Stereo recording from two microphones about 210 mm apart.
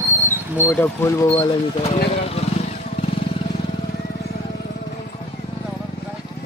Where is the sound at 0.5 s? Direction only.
10° left (ahead or behind); by 2.0 s 25° left (ahead or behind).